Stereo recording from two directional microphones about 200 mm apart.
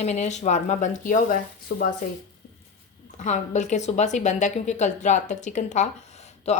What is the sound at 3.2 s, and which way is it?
Speech, 35° left (ahead or behind).